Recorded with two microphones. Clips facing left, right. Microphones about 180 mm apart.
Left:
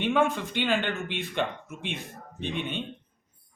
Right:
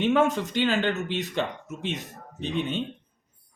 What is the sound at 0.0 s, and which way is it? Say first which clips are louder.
Speech: right 3 dB; 45° right (ahead or behind).